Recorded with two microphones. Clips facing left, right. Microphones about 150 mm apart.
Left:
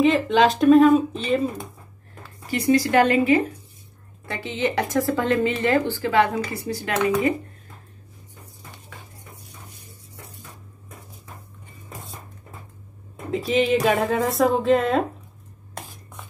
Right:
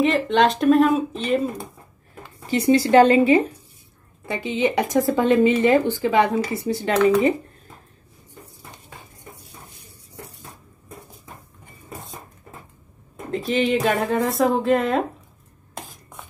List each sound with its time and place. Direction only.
0.0 s speech: centre (ahead or behind)
2.2 s speech: 25° right (ahead or behind)
4.3 s speech: 15° right (ahead or behind)
13.3 s speech: centre (ahead or behind)